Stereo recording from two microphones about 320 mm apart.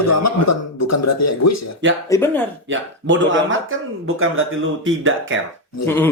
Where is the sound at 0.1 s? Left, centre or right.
Left.